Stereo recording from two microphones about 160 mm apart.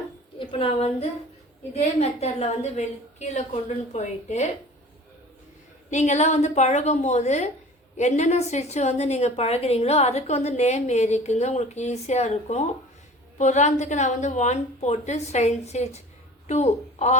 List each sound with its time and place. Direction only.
0.3 s a woman's voice: 35° left (ahead or behind)
5.9 s a woman's voice: 45° left (ahead or behind)